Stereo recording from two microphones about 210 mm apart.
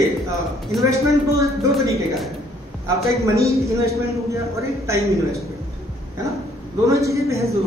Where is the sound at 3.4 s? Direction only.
15° right (ahead or behind).